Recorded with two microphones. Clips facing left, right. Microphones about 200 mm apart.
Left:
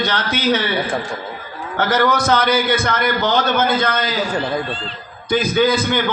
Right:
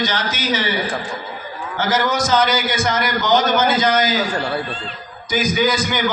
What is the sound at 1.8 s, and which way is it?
A man's voice, 60° left (ahead or behind).